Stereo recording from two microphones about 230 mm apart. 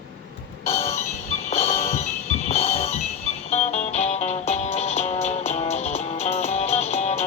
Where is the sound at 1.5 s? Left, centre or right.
Left.